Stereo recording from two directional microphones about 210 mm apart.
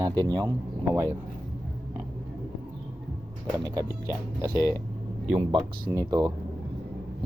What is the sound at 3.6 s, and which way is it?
Speech, 15° right (ahead or behind).